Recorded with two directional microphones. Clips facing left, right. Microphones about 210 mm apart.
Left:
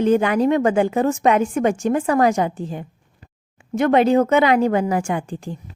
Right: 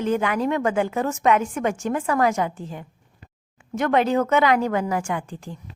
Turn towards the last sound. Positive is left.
turn(degrees=30)  # may be behind; listen again after turning